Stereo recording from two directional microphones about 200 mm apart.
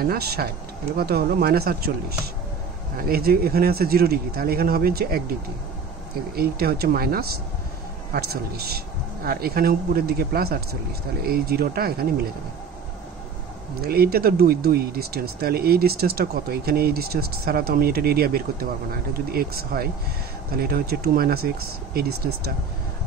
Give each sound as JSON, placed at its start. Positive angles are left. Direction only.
{"t": 0.0, "sound": "speech", "side_deg": -50}
{"t": 6.3, "sound": "speech", "side_deg": -50}
{"t": 13.7, "sound": "speech", "side_deg": -50}